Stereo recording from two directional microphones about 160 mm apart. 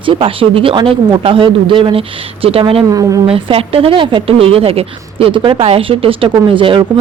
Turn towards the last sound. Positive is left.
turn(degrees=-30)  # may be behind; listen again after turning